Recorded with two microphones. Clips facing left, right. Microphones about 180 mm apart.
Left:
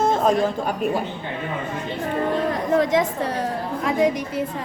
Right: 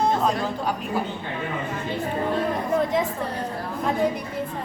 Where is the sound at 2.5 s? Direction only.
90° left.